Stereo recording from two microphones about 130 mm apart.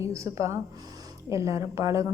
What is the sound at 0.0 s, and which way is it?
A woman's voice, 25° right (ahead or behind).